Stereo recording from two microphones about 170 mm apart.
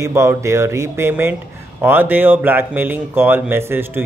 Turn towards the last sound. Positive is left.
turn(degrees=-10)  # may be behind; listen again after turning